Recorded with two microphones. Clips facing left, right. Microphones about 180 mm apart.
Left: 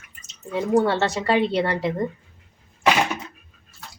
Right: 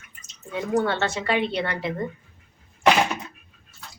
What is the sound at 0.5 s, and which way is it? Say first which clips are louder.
A woman's voice: left 4 dB; 30° left (ahead or behind).